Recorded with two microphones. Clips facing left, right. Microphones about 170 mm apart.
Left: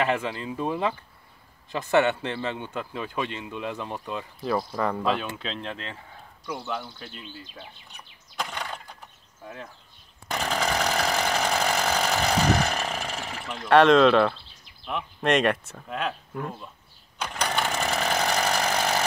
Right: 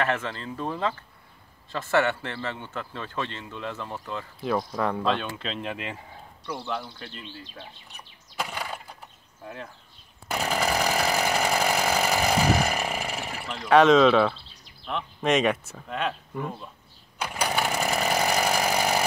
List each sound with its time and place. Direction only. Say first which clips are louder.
0.0 s a man's voice: left 2 dB; 15° left (ahead or behind)
4.4 s speech: even; centre (ahead or behind); by 6.0 s 15° right (ahead or behind)
6.4 s speech: even; 5° left (ahead or behind)
8.4 s a sound: right 1 dB; 5° right (ahead or behind)
9.4 s speech: right 1 dB; centre (ahead or behind)
10.2 s chainsaw: right 1 dB; 5° right (ahead or behind)
13.6 s speech: even; centre (ahead or behind)
17.2 s chainsaw: right 1 dB; 10° right (ahead or behind)